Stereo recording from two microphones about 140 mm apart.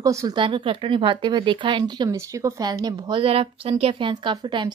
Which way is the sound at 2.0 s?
20° right (ahead or behind).